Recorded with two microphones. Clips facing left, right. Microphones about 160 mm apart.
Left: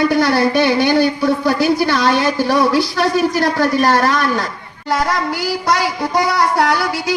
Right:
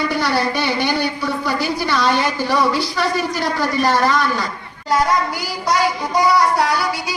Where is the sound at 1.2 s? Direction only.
75° left (ahead or behind).